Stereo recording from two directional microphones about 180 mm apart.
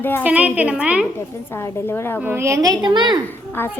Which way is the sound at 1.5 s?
15° left (ahead or behind).